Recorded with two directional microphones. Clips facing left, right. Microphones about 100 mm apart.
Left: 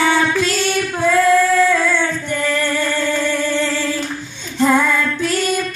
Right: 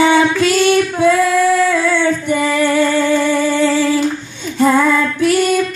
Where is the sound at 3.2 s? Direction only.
10° right (ahead or behind).